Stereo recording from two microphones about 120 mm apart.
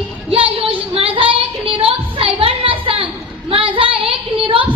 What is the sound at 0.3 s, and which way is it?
Child singing, 50° right (ahead or behind).